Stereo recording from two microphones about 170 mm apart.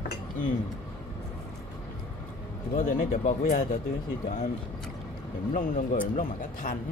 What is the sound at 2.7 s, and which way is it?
Speech, 50° left (ahead or behind).